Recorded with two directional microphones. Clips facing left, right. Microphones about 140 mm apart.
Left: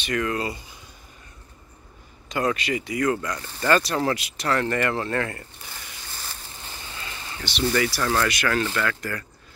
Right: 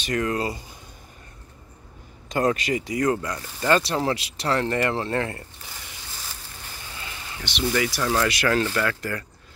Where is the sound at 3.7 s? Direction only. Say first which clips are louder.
Even; 25° right (ahead or behind).